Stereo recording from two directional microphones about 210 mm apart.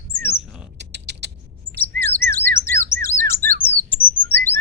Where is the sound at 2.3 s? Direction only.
10° left (ahead or behind).